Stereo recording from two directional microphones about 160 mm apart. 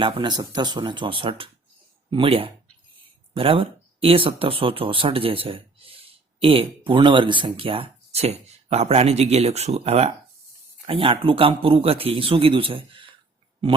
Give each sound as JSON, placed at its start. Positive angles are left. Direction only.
{"t": 0.0, "sound": "a man's voice", "side_deg": -25}